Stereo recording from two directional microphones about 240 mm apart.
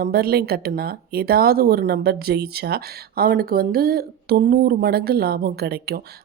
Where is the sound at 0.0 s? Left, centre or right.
Right.